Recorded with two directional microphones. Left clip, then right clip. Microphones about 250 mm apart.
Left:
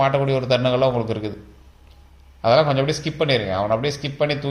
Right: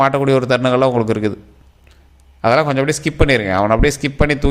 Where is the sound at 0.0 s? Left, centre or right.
Right.